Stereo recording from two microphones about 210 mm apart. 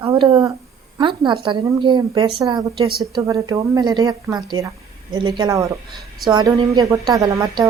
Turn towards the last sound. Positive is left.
turn(degrees=-15)  # may be behind; listen again after turning